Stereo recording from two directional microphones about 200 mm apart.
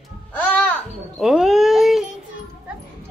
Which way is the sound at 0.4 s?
10° left (ahead or behind).